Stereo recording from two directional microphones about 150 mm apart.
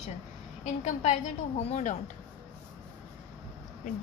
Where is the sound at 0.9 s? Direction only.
55° left (ahead or behind).